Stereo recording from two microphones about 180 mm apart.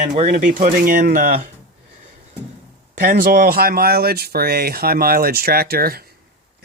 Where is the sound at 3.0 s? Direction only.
55° right (ahead or behind).